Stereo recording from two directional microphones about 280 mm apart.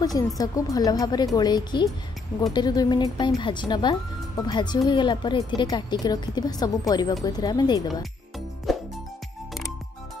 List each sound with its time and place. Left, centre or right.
0.4 s a woman's voice: centre
8.7 s music: centre